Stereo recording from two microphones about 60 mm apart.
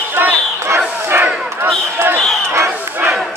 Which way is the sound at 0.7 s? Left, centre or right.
Right.